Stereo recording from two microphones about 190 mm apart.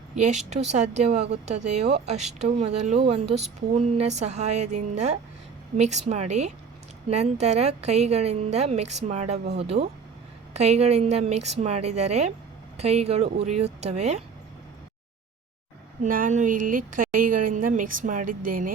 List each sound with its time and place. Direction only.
0.2 s speech: 35° right (ahead or behind)
16.0 s a woman's voice: 45° right (ahead or behind)